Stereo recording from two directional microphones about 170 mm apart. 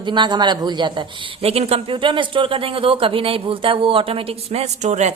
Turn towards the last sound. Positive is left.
turn(degrees=-40)  # may be behind; listen again after turning